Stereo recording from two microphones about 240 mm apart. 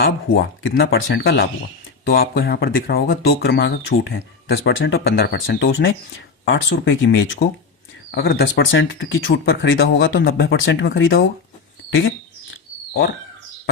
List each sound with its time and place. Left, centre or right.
0.0 s speech: left
8.7 s speech: left